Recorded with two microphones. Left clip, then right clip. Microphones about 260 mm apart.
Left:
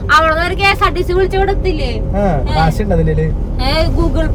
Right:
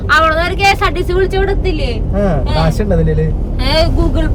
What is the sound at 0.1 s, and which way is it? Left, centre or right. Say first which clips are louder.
Vehicle: even; centre.